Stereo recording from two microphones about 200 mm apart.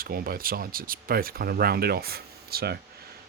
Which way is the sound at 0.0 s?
45° right (ahead or behind).